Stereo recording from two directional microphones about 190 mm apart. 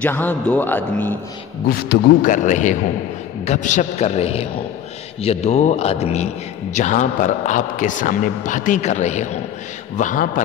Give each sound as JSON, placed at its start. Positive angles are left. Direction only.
{"t": 0.0, "sound": "a man's voice", "side_deg": 10}
{"t": 1.7, "sound": "a man's voice", "side_deg": 45}